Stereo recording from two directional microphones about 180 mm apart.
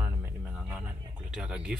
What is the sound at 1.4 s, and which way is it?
Speech, 5° right (ahead or behind).